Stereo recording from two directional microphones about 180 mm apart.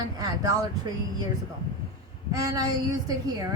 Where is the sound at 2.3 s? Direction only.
20° right (ahead or behind).